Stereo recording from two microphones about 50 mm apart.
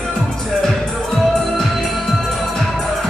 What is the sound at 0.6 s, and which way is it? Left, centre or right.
Music, centre.